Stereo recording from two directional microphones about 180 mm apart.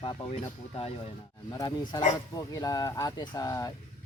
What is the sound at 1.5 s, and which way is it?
Speech, 20° left (ahead or behind).